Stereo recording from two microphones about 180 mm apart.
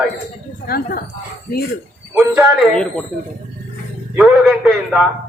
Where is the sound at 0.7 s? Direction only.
55° left (ahead or behind).